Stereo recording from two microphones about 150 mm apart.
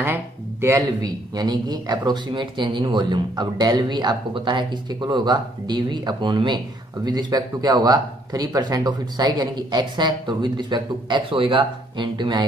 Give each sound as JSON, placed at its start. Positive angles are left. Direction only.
{"t": 0.0, "sound": "speech", "side_deg": -15}